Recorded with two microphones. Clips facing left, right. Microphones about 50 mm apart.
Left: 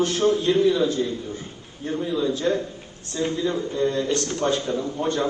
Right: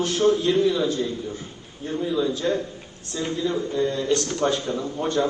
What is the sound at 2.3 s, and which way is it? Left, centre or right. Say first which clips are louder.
Speech: left 1 dB; left.